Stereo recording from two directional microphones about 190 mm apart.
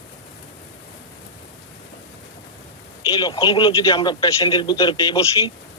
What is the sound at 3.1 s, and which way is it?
A man's voice, 20° left (ahead or behind).